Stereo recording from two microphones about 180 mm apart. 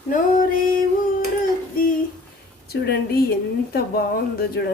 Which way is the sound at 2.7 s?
60° left (ahead or behind).